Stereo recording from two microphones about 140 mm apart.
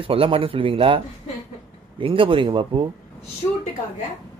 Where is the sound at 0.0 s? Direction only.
40° right (ahead or behind).